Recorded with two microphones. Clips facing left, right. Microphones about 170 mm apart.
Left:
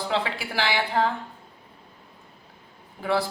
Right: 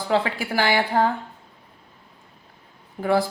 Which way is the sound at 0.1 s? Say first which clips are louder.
Right 8 dB; 45° right (ahead or behind).